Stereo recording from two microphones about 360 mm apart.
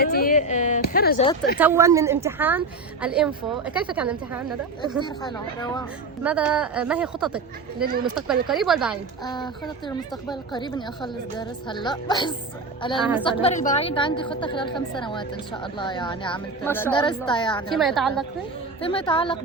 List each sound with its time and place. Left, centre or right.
0.0 s speech: left
1.5 s a woman's voice: centre
5.0 s a woman's voice: centre
6.2 s a woman's voice: centre
9.2 s a woman's voice: centre
13.0 s a woman's voice: centre
13.4 s a woman's voice: centre
17.7 s a woman's voice: centre
18.8 s a woman's voice: centre